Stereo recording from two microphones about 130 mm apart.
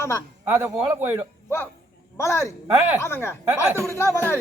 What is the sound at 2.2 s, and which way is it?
Speech, 20° left (ahead or behind).